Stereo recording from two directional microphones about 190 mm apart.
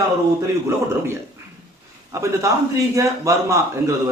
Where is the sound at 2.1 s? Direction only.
15° right (ahead or behind).